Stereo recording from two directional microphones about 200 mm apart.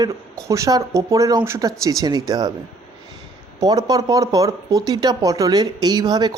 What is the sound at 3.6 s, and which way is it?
Speech, 20° right (ahead or behind).